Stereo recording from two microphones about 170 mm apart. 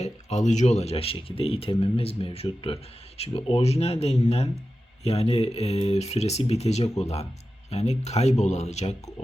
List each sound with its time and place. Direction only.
0.0 s speech: 40° left (ahead or behind)